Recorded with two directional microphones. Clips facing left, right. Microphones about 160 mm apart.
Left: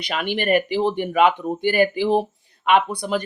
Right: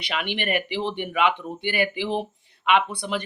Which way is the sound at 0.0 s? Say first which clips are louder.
Left 4 dB; 45° left (ahead or behind).